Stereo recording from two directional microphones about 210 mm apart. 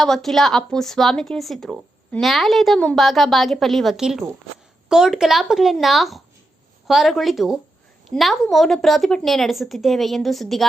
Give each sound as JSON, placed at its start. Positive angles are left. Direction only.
{"t": 0.0, "sound": "speech", "side_deg": 0}